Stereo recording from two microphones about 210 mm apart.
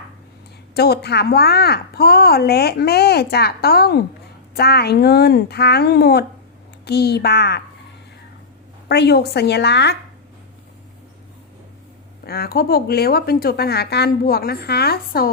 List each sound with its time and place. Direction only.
0.7 s a woman's voice: 50° left (ahead or behind)
8.9 s a woman's voice: 50° left (ahead or behind)
12.2 s a woman's voice: 45° left (ahead or behind)